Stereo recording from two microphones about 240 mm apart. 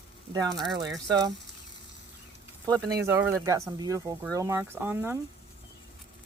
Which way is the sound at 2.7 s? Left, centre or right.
Centre.